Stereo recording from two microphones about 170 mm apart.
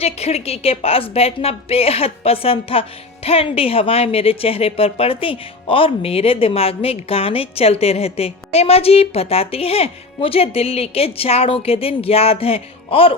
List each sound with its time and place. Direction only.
0.0 s speech: 40° left (ahead or behind)